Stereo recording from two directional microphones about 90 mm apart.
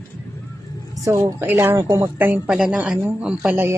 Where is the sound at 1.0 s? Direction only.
30° right (ahead or behind).